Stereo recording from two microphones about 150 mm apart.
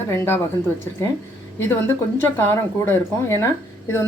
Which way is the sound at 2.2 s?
15° left (ahead or behind).